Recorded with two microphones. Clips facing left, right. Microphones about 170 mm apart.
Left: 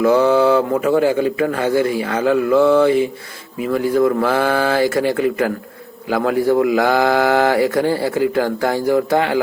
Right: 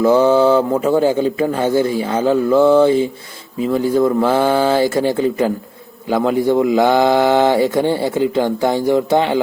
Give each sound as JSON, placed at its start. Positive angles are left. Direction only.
{"t": 0.0, "sound": "speech", "side_deg": -30}